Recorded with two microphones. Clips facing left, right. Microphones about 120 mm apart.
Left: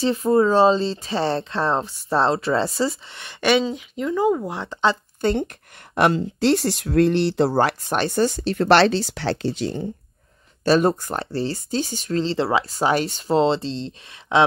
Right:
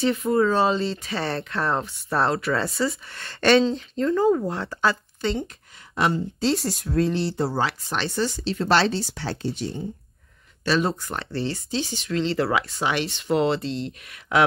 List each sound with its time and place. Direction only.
0.0 s speech: 30° left (ahead or behind)
3.2 s speech: 15° left (ahead or behind)
5.2 s speech: 60° left (ahead or behind); by 9.8 s 90° left
10.6 s speech: 45° left (ahead or behind); by 14.4 s 25° left (ahead or behind)